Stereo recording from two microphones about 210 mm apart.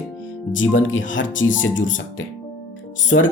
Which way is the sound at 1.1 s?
65° left (ahead or behind).